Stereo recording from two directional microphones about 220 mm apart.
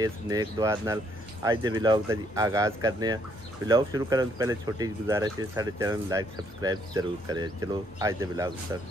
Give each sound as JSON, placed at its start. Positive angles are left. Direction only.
{"t": 0.0, "sound": "speech", "side_deg": -15}